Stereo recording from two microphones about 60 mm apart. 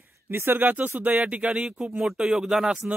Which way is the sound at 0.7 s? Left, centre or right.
Right.